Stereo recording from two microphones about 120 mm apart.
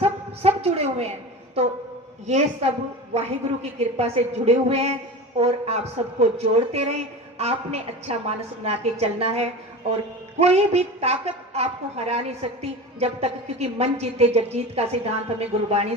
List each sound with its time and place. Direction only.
0.0 s a sound: 55° right (ahead or behind)
1.6 s a woman's voice: 55° right (ahead or behind)
2.2 s a woman's voice: 65° right (ahead or behind)